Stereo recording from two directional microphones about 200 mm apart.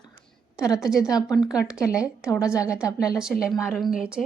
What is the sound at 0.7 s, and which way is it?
Speech, centre (ahead or behind).